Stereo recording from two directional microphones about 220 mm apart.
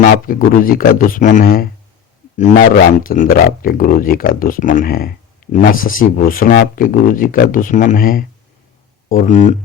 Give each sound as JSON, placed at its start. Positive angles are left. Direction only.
{"t": 0.0, "sound": "speech", "side_deg": 40}